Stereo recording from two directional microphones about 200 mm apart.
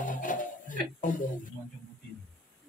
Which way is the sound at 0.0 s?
40° left (ahead or behind).